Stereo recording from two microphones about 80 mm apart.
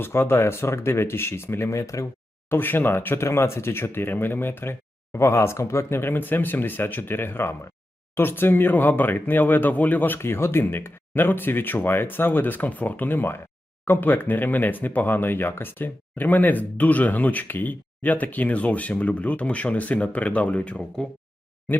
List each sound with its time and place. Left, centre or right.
0.0 s speech: left
2.5 s speech: left